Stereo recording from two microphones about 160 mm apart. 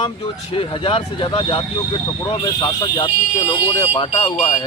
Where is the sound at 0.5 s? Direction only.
35° left (ahead or behind).